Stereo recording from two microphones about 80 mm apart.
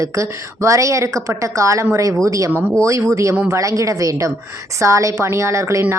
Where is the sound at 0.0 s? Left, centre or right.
Right.